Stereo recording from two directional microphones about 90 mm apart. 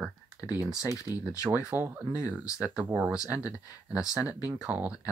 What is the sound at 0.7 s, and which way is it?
Speech, 40° left (ahead or behind).